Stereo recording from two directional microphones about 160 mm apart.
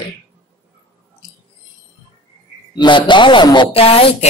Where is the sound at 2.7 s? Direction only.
30° left (ahead or behind).